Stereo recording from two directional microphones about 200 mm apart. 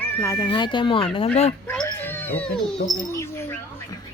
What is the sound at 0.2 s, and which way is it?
Speech, 15° left (ahead or behind).